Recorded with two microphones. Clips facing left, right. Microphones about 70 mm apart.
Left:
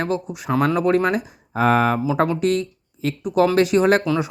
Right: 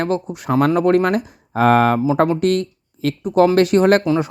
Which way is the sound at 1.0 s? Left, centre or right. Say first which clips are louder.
Right 2 dB; right.